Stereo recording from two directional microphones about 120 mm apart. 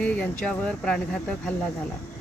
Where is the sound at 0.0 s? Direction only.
10° left (ahead or behind).